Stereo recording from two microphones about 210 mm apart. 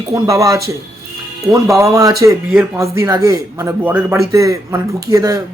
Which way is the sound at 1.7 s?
15° right (ahead or behind).